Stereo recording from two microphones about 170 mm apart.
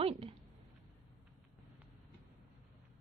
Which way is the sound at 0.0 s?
35° right (ahead or behind).